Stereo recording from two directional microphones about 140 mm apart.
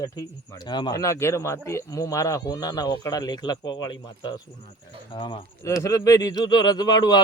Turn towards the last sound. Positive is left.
turn(degrees=30)  # may be behind; listen again after turning